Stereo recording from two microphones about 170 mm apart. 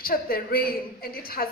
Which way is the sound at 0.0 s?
60° left (ahead or behind).